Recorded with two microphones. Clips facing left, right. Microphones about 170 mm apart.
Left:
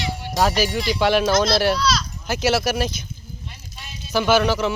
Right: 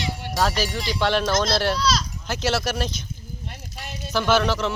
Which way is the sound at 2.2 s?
5° left (ahead or behind).